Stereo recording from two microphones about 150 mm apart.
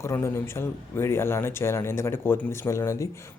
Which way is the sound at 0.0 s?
20° left (ahead or behind).